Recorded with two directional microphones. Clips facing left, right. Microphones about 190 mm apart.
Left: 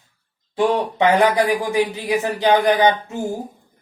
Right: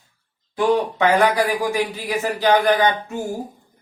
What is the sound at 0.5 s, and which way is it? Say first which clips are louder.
Speech: even; 20° left (ahead or behind).